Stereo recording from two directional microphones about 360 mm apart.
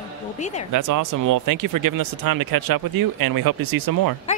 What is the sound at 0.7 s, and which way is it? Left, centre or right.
Speech, right.